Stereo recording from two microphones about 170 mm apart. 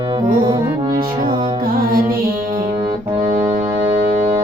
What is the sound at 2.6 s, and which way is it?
Music, 25° right (ahead or behind).